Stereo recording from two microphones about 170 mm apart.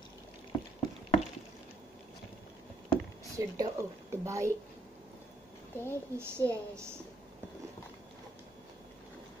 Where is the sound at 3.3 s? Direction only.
20° right (ahead or behind).